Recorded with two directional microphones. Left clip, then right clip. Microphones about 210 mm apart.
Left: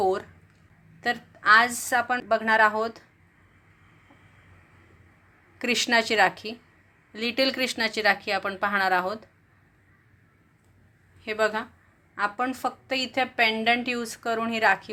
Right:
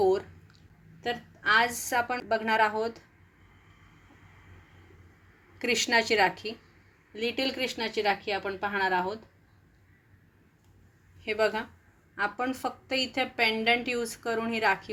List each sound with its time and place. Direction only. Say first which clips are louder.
0.0 s a sound: even; 25° left (ahead or behind)
1.0 s a woman's voice: left 6 dB; 25° left (ahead or behind)
5.5 s a woman's voice: left 2 dB; 20° left (ahead or behind)
11.2 s a woman's voice: left 2 dB; 15° left (ahead or behind)